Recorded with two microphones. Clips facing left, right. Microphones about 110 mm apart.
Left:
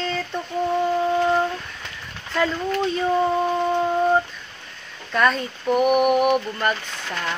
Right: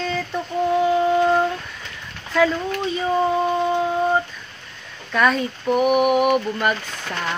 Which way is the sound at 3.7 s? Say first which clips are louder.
Even; 5° right (ahead or behind).